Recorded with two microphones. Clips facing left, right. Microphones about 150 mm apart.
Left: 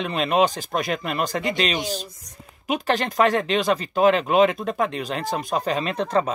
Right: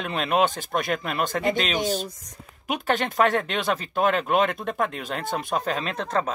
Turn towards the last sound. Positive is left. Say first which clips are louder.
# left 4 dB
turn(degrees=0)  # may be behind; listen again after turning